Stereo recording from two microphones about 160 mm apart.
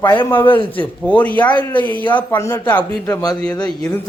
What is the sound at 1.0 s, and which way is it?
A man's voice, 10° left (ahead or behind).